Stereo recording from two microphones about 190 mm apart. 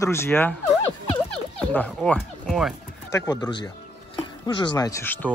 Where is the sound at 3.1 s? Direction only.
20° left (ahead or behind).